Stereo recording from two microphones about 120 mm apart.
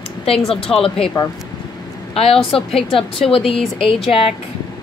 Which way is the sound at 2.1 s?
55° left (ahead or behind).